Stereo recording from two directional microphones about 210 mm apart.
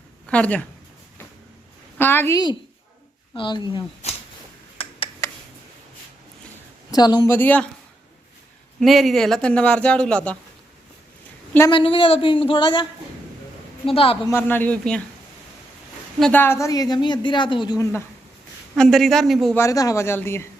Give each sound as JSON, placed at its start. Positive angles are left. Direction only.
{"t": 0.3, "sound": "speech", "side_deg": 5}
{"t": 2.0, "sound": "a woman's voice", "side_deg": 10}
{"t": 4.8, "sound": "a sound", "side_deg": 30}
{"t": 5.2, "sound": "a sound", "side_deg": 10}
{"t": 6.9, "sound": "speech", "side_deg": 20}
{"t": 8.8, "sound": "a man's voice", "side_deg": 0}
{"t": 11.7, "sound": "a woman's voice", "side_deg": 25}
{"t": 13.8, "sound": "a woman's voice", "side_deg": 25}
{"t": 14.3, "sound": "speech", "side_deg": 10}
{"t": 16.2, "sound": "a woman's voice", "side_deg": 10}
{"t": 18.8, "sound": "a man's voice", "side_deg": 0}
{"t": 19.5, "sound": "speech", "side_deg": 15}